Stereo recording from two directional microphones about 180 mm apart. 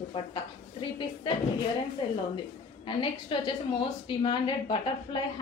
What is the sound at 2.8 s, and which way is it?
A woman's voice, 30° left (ahead or behind).